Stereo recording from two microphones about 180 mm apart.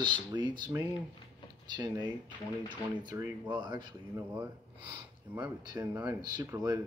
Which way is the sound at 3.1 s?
20° right (ahead or behind).